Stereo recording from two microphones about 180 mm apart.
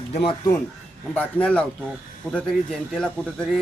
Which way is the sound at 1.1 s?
5° left (ahead or behind).